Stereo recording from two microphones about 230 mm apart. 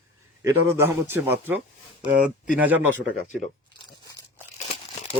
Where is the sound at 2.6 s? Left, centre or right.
Centre.